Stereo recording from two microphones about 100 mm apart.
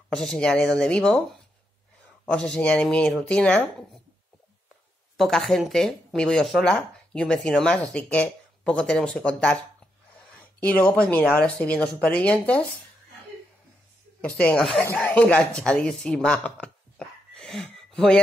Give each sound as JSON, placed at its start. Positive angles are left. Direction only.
{"t": 0.1, "sound": "speech", "side_deg": 10}
{"t": 2.2, "sound": "speech", "side_deg": 10}
{"t": 5.1, "sound": "speech", "side_deg": 0}
{"t": 10.6, "sound": "speech", "side_deg": 15}
{"t": 14.5, "sound": "speech", "side_deg": 0}
{"t": 14.8, "sound": "speech", "side_deg": 15}
{"t": 17.3, "sound": "a sound", "side_deg": 5}